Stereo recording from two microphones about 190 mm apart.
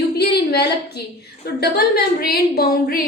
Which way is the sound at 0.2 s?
55° left (ahead or behind).